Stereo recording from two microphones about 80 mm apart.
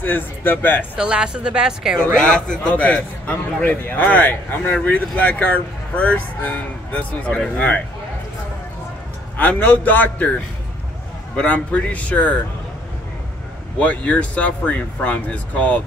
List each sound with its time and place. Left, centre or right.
0.0 s speech: left
0.9 s speech: centre
2.1 s speech: centre
9.4 s speech: centre
11.3 s speech: centre
13.7 s speech: centre